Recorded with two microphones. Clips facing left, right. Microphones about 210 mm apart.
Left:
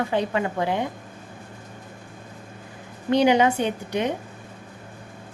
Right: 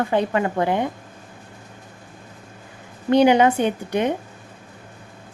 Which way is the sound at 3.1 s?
55° right (ahead or behind).